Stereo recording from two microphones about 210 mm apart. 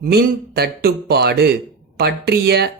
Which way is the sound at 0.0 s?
50° right (ahead or behind).